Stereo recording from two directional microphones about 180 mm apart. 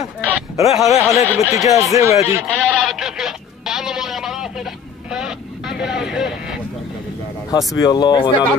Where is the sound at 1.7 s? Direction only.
15° right (ahead or behind).